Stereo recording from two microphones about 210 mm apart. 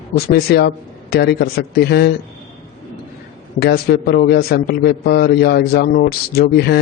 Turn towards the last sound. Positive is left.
turn(degrees=50)  # may be behind; listen again after turning